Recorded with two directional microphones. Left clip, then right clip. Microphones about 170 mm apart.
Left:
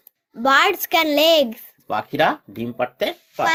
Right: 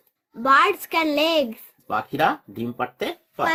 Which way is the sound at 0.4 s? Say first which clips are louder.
Left 1 dB; 25° left (ahead or behind).